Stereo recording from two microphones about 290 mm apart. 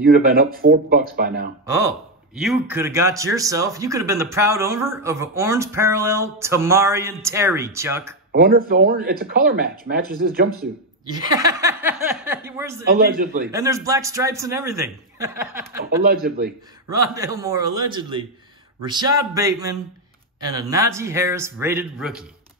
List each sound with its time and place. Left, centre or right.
0.0 s speech: right
1.7 s a man's voice: centre
8.3 s speech: right
11.2 s a man's voice: centre
13.0 s a man's voice: right
13.5 s a man's voice: centre
15.8 s speech: right
16.9 s a man's voice: centre